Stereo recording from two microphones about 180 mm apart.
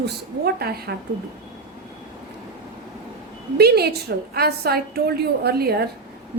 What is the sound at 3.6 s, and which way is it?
A woman's voice, 60° right (ahead or behind).